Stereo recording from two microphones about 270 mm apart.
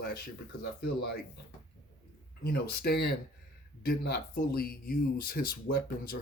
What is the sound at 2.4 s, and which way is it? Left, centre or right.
Speech, left.